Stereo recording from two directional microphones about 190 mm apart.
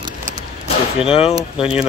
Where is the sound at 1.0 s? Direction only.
30° left (ahead or behind).